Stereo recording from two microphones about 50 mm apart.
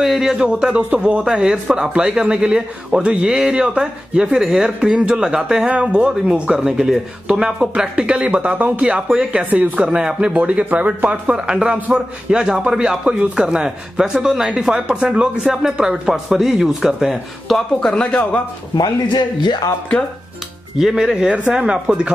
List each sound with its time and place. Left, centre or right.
0.0 s speech: centre
5.7 s speech: right
9.4 s speech: right
10.0 s speech: right; by 18.0 s centre
20.7 s speech: centre